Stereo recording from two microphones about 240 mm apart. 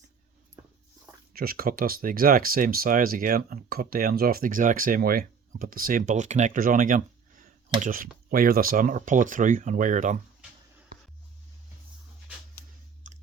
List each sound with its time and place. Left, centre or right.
1.3 s speech: right
13.0 s chewing: right